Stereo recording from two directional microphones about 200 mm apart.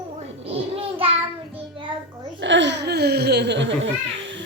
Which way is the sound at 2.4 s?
65° right (ahead or behind).